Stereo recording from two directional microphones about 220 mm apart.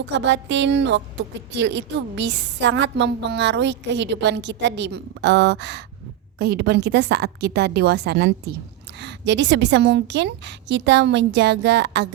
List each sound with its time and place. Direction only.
0.0 s a woman's voice: 55° right (ahead or behind)